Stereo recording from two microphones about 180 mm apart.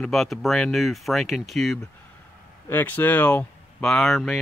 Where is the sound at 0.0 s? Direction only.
Centre (ahead or behind).